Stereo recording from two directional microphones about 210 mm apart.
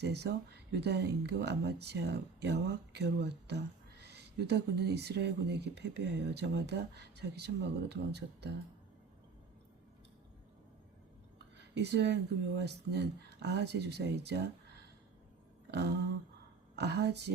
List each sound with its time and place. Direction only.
0.0 s speech: 55° right (ahead or behind)
11.5 s speech: 55° right (ahead or behind)
16.7 s speech: 55° right (ahead or behind)